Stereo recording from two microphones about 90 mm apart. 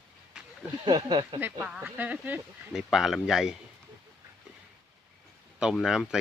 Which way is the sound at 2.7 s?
Centre (ahead or behind).